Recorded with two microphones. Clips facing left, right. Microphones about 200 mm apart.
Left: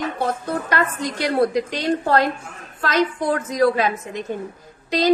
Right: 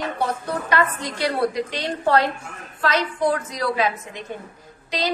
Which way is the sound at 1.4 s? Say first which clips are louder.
Left 4 dB; 45° left (ahead or behind).